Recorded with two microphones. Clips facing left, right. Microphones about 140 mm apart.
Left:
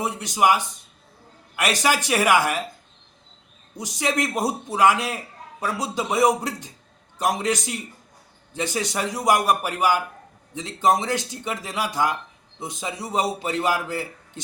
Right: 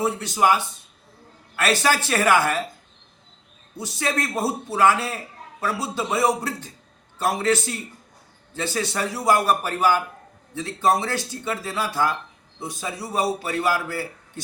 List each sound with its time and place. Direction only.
0.0 s a man's voice: 15° left (ahead or behind)
3.8 s a man's voice: 20° left (ahead or behind)